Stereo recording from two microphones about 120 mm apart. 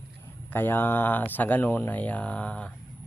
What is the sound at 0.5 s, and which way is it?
Speech, 15° left (ahead or behind).